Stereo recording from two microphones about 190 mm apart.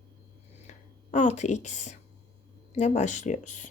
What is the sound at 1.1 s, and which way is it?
Speech, 40° left (ahead or behind).